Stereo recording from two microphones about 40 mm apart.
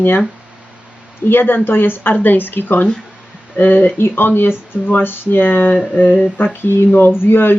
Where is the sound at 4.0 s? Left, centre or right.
Left.